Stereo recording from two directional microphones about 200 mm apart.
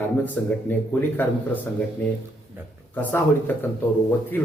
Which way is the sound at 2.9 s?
10° left (ahead or behind).